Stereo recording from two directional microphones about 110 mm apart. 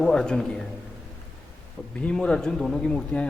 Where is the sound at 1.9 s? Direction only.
10° left (ahead or behind).